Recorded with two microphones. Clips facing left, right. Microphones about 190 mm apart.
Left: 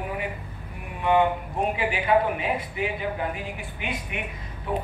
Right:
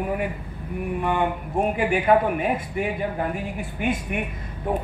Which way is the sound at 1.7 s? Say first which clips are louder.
Right 3 dB; 50° right (ahead or behind).